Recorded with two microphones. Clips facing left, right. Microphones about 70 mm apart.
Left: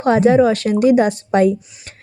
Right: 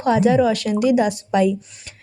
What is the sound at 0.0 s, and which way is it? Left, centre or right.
Speech, left.